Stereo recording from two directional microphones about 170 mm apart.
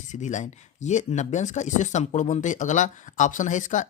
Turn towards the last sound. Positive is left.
turn(degrees=50)  # may be behind; listen again after turning